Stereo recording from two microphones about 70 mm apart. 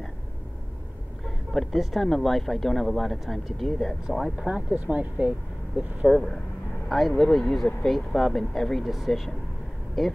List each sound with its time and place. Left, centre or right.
1.2 s speech: centre
4.4 s speech: centre
6.0 s speech: centre